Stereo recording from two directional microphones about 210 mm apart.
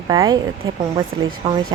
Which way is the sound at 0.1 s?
20° right (ahead or behind).